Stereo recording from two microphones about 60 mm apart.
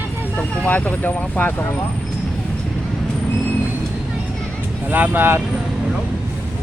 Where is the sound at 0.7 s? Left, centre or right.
Left.